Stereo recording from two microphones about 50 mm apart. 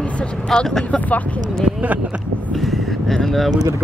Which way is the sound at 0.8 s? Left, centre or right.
Left.